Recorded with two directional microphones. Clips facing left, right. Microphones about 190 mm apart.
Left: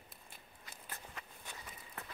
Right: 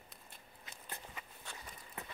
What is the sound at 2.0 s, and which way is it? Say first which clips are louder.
Run: right 2 dB; 15° right (ahead or behind).